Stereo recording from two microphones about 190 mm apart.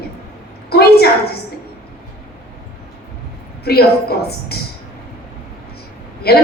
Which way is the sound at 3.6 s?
55° left (ahead or behind).